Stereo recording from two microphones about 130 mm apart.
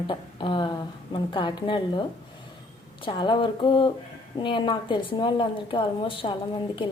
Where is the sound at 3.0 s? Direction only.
40° left (ahead or behind).